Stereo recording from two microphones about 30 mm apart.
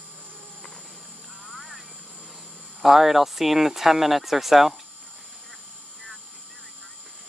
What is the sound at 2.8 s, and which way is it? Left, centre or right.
Speech, centre.